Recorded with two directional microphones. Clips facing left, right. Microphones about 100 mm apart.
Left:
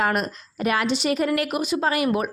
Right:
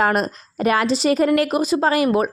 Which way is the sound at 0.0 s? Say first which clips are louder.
Right 4 dB; 35° right (ahead or behind).